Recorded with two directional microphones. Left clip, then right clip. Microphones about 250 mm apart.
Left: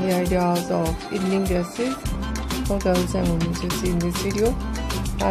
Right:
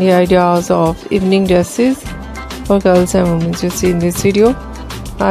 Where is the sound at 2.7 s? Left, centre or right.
Right.